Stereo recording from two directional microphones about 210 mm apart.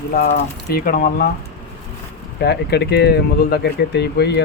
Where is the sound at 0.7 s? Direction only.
40° left (ahead or behind).